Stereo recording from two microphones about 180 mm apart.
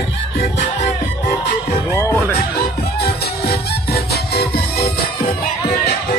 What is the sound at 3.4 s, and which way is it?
Music, 60° left (ahead or behind).